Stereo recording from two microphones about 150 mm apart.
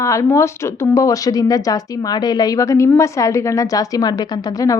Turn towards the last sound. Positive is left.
turn(degrees=20)  # may be behind; listen again after turning